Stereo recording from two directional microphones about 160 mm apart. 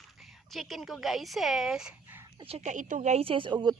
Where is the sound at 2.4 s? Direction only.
40° right (ahead or behind).